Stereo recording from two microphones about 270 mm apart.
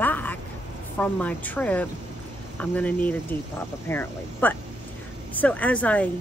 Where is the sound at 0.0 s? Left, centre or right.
Centre.